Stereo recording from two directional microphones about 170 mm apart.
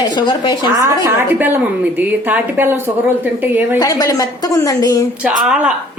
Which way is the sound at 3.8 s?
20° left (ahead or behind).